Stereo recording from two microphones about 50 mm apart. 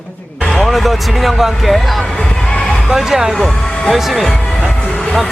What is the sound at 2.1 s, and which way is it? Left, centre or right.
Music, centre.